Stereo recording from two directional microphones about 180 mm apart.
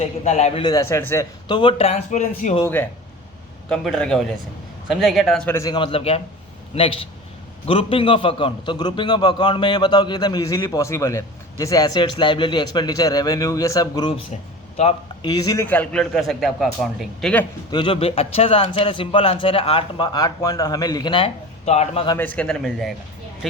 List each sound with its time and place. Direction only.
0.0 s a man's voice: 40° left (ahead or behind)
0.6 s a man's voice: 20° left (ahead or behind); by 2.6 s 45° left (ahead or behind)
3.7 s a man's voice: 5° left (ahead or behind)
5.5 s a man's voice: 20° left (ahead or behind)
15.6 s a man's voice: 10° left (ahead or behind)
17.7 s a man's voice: 25° left (ahead or behind)
22.1 s a man's voice: 10° left (ahead or behind)